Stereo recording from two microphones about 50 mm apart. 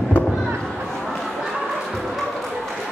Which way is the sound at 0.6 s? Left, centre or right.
Centre.